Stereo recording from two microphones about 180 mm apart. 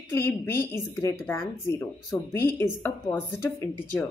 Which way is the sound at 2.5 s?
15° left (ahead or behind).